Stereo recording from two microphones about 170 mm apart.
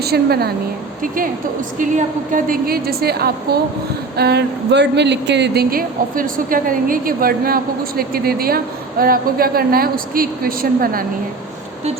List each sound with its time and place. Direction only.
0.0 s a woman's voice: 65° right (ahead or behind)
1.0 s speech: 55° right (ahead or behind)